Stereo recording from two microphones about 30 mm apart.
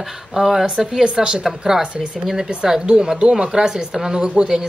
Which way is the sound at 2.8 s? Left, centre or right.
Right.